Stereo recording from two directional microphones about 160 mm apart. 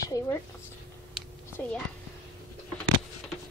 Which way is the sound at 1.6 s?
15° left (ahead or behind).